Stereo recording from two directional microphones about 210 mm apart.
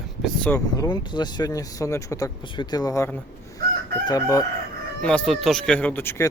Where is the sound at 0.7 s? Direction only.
20° left (ahead or behind).